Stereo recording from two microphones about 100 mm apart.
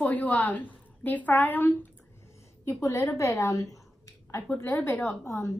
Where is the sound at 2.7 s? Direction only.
30° left (ahead or behind).